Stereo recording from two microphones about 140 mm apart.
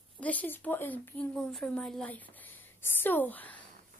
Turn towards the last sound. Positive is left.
turn(degrees=10)  # may be behind; listen again after turning